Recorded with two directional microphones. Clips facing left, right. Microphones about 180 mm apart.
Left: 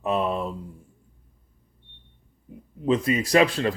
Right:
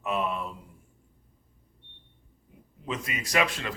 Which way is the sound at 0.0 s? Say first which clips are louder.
Left 5 dB; 35° left (ahead or behind).